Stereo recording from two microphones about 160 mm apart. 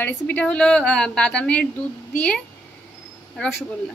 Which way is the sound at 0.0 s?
10° left (ahead or behind).